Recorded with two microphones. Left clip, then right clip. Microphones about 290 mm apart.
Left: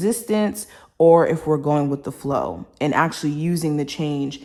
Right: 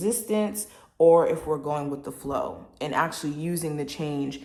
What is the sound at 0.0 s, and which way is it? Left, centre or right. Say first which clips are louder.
Speech: left 5 dB; left.